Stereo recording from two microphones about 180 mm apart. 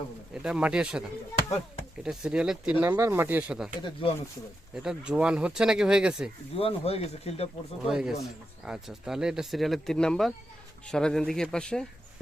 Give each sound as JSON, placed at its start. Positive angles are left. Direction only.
{"t": 0.4, "sound": "speech", "side_deg": -5}
{"t": 3.8, "sound": "speech", "side_deg": 25}
{"t": 4.7, "sound": "speech", "side_deg": -5}
{"t": 6.6, "sound": "speech", "side_deg": 35}
{"t": 7.9, "sound": "speech", "side_deg": 0}